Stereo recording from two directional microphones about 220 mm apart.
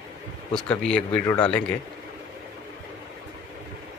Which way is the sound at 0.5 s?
5° left (ahead or behind).